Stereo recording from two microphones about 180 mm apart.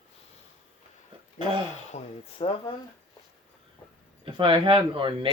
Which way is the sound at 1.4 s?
25° right (ahead or behind).